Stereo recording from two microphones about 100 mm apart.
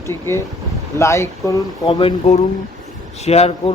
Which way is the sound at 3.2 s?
90° left.